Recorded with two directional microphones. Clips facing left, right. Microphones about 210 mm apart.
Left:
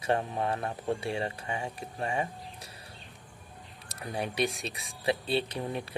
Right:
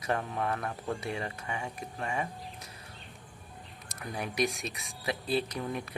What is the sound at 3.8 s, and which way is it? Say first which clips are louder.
Speech: left 3 dB; 30° left (ahead or behind).